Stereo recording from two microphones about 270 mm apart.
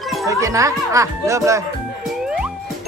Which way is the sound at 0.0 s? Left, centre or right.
Centre.